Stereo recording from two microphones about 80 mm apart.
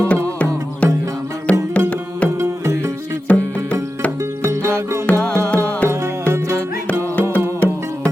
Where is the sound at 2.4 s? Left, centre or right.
Right.